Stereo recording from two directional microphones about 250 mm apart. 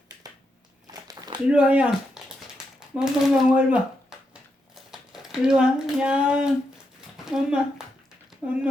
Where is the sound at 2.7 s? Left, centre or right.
Centre.